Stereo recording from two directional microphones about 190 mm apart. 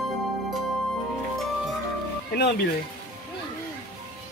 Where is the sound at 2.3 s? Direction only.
60° left (ahead or behind).